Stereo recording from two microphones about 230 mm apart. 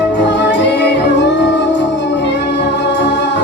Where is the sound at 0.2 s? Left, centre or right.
Left.